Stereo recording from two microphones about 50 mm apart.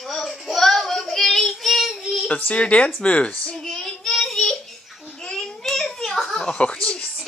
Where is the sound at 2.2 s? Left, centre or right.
Left.